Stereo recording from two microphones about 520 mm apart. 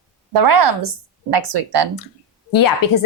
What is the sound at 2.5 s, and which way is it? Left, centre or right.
Speech, left.